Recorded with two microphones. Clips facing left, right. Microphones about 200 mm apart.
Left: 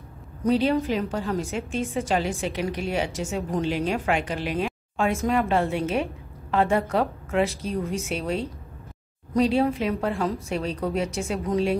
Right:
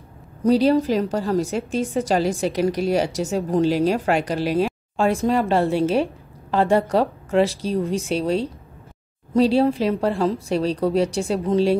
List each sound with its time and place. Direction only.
0.4 s a woman's voice: 35° right (ahead or behind)